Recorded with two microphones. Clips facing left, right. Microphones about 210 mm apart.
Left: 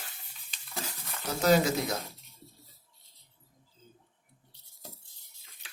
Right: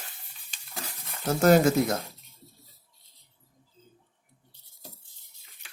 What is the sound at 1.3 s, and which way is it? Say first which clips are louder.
Speech: right 5 dB; 50° right (ahead or behind).